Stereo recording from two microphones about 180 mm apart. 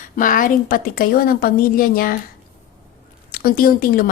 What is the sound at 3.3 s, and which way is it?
Speech, 55° left (ahead or behind).